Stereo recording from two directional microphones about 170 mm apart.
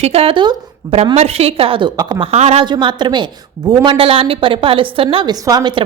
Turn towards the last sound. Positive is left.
turn(degrees=-25)  # may be behind; listen again after turning